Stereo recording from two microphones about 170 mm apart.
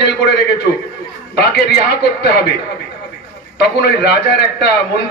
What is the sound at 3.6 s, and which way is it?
A man's voice, 75° left (ahead or behind).